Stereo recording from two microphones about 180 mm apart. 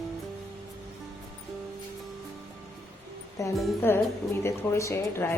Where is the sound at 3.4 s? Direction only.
15° left (ahead or behind).